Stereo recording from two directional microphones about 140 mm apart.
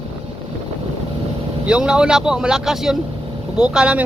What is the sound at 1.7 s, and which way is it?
Speech, 5° right (ahead or behind).